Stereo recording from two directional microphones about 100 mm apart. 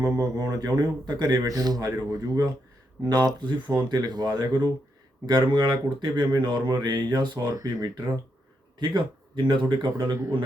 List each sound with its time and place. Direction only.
0.0 s speech: 35° right (ahead or behind); by 9.9 s 50° right (ahead or behind)
10.0 s speech: 25° right (ahead or behind)